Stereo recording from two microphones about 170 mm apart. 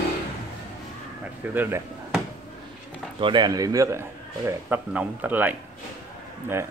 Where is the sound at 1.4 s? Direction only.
10° right (ahead or behind).